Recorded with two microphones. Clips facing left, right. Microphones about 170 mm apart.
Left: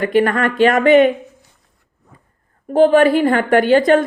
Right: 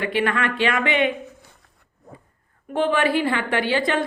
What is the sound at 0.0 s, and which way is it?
A woman's voice, 45° left (ahead or behind).